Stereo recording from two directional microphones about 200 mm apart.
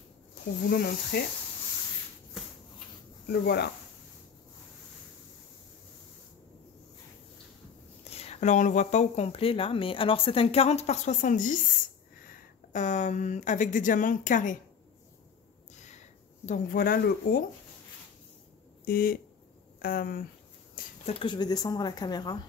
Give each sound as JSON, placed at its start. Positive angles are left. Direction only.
{"t": 0.7, "sound": "speech", "side_deg": 55}
{"t": 3.3, "sound": "speech", "side_deg": 55}
{"t": 8.0, "sound": "speech", "side_deg": 30}
{"t": 12.7, "sound": "speech", "side_deg": 35}
{"t": 16.4, "sound": "speech", "side_deg": 45}
{"t": 18.9, "sound": "speech", "side_deg": 50}
{"t": 21.0, "sound": "speech", "side_deg": 25}